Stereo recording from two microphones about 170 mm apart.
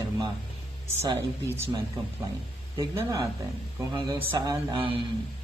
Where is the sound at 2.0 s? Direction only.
25° right (ahead or behind).